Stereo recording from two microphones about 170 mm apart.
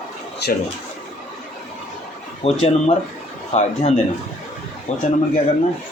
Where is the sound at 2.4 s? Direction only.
35° left (ahead or behind).